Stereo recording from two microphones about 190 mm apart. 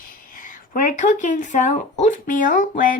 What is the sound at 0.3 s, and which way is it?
Speech, 45° left (ahead or behind).